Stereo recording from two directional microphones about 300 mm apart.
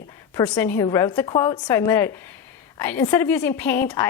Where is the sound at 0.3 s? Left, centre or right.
Centre.